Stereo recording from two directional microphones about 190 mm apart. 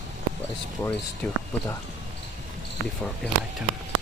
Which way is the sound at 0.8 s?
10° left (ahead or behind).